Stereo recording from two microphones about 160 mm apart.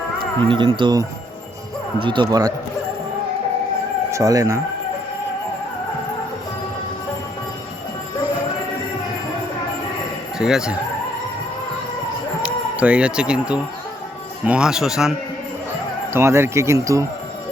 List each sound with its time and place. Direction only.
0.4 s speech: 35° right (ahead or behind)
4.1 s speech: 20° right (ahead or behind)
10.3 s speech: 5° right (ahead or behind)
12.4 s a man's voice: 10° right (ahead or behind)
16.1 s speech: 15° right (ahead or behind)